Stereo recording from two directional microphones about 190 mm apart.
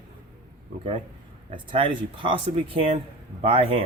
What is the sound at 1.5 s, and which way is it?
Speech, 25° right (ahead or behind).